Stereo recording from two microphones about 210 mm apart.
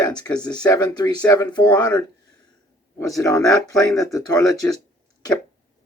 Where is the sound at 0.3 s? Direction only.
20° left (ahead or behind).